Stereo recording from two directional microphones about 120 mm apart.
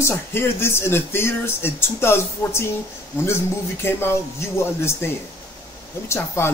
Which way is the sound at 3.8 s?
20° left (ahead or behind).